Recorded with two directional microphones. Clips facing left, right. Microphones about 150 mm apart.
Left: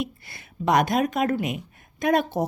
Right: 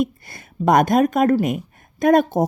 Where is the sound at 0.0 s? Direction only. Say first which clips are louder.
Right 8 dB; 45° right (ahead or behind).